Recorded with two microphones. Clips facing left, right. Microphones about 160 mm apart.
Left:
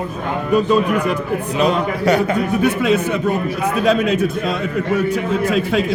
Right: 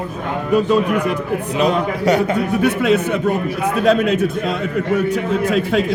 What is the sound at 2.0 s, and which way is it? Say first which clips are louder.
Speech: even; 20° right (ahead or behind).